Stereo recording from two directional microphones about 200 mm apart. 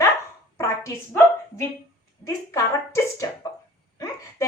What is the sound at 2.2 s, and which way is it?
A woman's voice, 15° left (ahead or behind).